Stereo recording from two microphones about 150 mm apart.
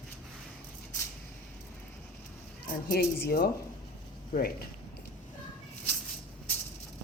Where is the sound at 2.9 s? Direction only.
90° left.